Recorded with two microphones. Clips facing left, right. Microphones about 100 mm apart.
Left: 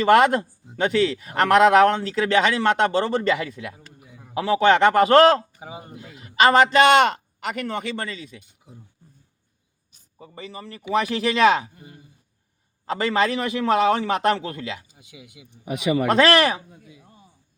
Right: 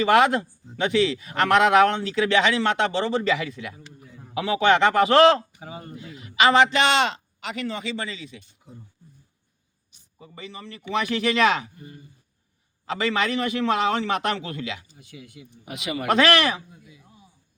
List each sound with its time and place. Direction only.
0.0 s speech: 45° left (ahead or behind)
4.0 s a sound: 10° left (ahead or behind)
4.4 s speech: 40° left (ahead or behind)
5.5 s a sound: 15° left (ahead or behind)
6.0 s a man's voice: 40° left (ahead or behind)
9.9 s a sound: 40° left (ahead or behind)
10.9 s a man's voice: 40° left (ahead or behind)
12.8 s a man's voice: 40° left (ahead or behind)
14.8 s speech: 15° left (ahead or behind)
16.0 s a man's voice: 40° left (ahead or behind)
16.8 s speech: 50° left (ahead or behind)